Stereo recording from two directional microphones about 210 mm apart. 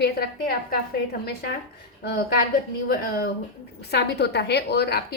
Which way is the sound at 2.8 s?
50° left (ahead or behind).